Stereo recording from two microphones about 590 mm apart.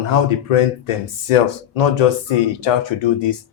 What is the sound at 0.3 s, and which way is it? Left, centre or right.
Speech, left.